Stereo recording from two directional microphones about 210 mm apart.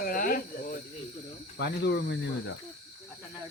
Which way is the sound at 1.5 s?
55° left (ahead or behind).